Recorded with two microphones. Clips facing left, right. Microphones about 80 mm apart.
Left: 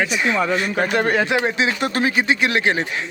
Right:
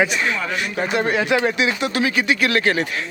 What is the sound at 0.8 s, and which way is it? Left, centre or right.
Speech, left.